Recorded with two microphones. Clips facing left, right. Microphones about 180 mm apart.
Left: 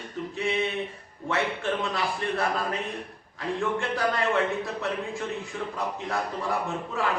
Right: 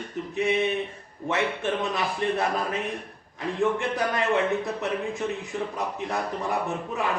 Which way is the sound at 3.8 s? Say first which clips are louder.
Even; 20° right (ahead or behind).